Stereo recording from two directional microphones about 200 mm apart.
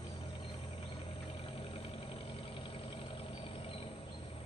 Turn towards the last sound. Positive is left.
turn(degrees=25)  # may be behind; listen again after turning